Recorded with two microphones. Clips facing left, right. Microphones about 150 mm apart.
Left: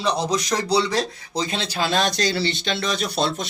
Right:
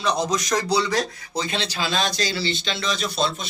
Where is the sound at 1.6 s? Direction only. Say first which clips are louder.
Left 3 dB; 55° left (ahead or behind).